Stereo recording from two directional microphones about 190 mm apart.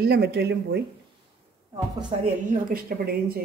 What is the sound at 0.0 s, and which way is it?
Speech, 60° right (ahead or behind).